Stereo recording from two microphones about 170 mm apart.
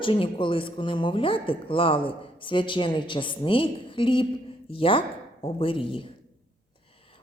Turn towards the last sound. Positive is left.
turn(degrees=30)  # may be behind; listen again after turning